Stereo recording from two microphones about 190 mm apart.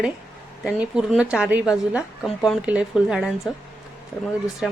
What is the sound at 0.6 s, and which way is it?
A woman's voice, 5° right (ahead or behind).